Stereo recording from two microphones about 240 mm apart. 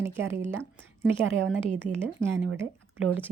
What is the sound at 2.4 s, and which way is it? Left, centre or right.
Speech, right.